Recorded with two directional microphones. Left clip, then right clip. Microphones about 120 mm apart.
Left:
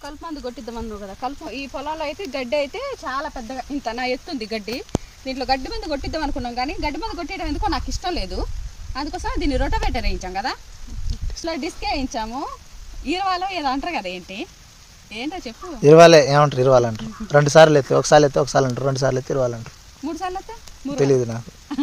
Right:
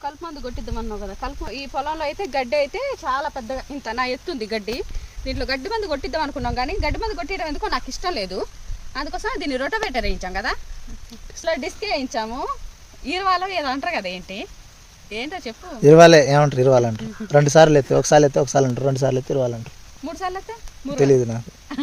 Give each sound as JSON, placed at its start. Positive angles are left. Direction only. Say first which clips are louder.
{"t": 0.0, "sound": "speech", "louder": "right 1 dB", "side_deg": -15}
{"t": 15.8, "sound": "speech", "louder": "even", "side_deg": -40}
{"t": 20.9, "sound": "speech", "louder": "right 2 dB", "side_deg": -40}